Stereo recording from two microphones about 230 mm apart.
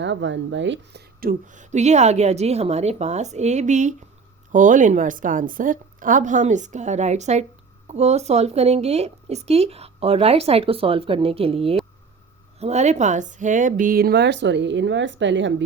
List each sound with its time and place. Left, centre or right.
0.0 s a woman's voice: right